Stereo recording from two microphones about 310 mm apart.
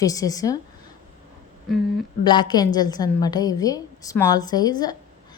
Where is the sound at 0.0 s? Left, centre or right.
Centre.